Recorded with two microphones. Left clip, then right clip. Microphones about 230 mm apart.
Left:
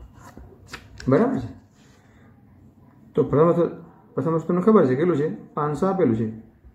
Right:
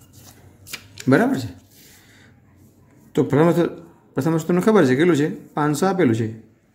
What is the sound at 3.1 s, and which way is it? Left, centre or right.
Speech, right.